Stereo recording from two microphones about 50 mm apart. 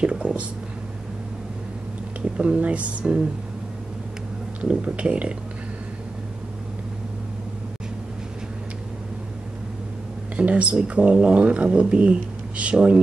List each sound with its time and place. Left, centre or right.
0.0 s speech: right
2.3 s speech: right
4.6 s speech: right
10.3 s speech: right